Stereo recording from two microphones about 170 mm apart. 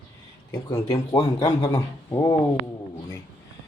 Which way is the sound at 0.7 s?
20° left (ahead or behind).